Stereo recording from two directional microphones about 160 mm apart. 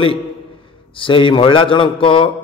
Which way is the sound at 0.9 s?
30° left (ahead or behind).